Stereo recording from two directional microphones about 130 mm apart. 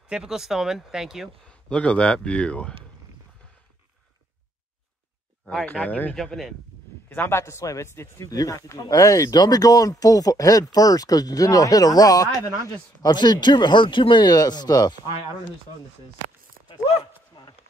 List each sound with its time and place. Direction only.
0.1 s speech: 5° right (ahead or behind)
1.5 s speech: 10° left (ahead or behind)
5.4 s speech: 5° left (ahead or behind)
6.1 s speech: centre (ahead or behind)
7.1 s speech: 15° left (ahead or behind)